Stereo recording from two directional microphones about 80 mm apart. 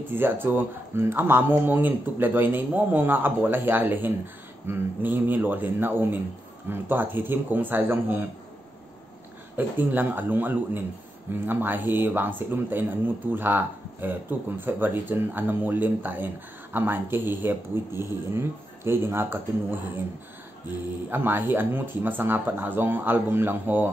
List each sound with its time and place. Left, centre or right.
0.1 s speech: right
9.6 s speech: right
21.1 s speech: right